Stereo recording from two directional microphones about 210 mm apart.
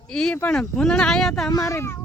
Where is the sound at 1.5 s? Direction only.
15° left (ahead or behind).